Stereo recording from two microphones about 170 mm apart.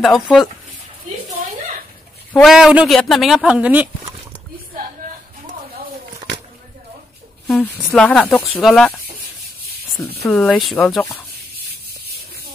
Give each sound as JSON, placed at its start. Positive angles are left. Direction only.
{"t": 0.0, "sound": "speech", "side_deg": 0}
{"t": 2.3, "sound": "speech", "side_deg": 0}
{"t": 7.4, "sound": "speech", "side_deg": 5}
{"t": 10.3, "sound": "speech", "side_deg": 5}
{"t": 12.1, "sound": "a sound", "side_deg": -65}